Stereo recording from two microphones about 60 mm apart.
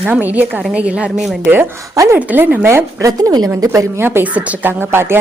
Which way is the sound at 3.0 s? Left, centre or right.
Right.